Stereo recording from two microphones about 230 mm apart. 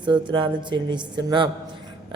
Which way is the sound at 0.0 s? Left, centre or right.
Centre.